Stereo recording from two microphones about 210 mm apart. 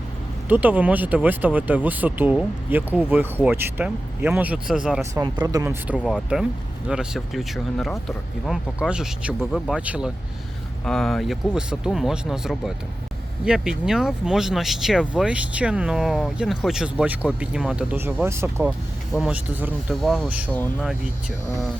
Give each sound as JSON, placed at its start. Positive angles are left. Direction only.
{"t": 0.4, "sound": "speech", "side_deg": -10}
{"t": 5.2, "sound": "speech", "side_deg": -20}
{"t": 6.1, "sound": "speech", "side_deg": -5}
{"t": 20.5, "sound": "speech", "side_deg": 5}